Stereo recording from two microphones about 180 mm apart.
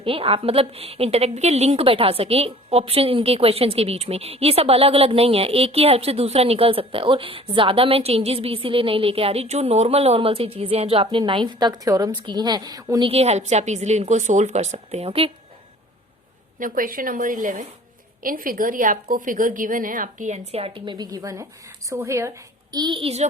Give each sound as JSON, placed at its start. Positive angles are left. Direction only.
{"t": 0.0, "sound": "a woman's voice", "side_deg": -30}
{"t": 13.1, "sound": "a woman's voice", "side_deg": -35}
{"t": 16.6, "sound": "a woman's voice", "side_deg": -50}
{"t": 20.5, "sound": "a woman's voice", "side_deg": -30}
{"t": 22.7, "sound": "a woman's voice", "side_deg": -25}